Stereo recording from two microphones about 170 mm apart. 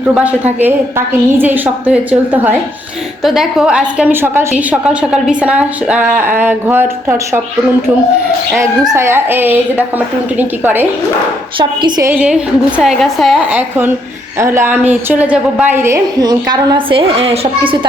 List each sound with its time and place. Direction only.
0.1 s a woman's voice: 10° right (ahead or behind)
9.0 s a woman's voice: 15° right (ahead or behind)
11.6 s a woman's voice: 25° right (ahead or behind)
12.1 s a woman's voice: 10° right (ahead or behind); by 17.5 s 35° right (ahead or behind)